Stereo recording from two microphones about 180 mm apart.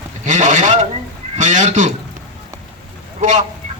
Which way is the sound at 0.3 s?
45° right (ahead or behind).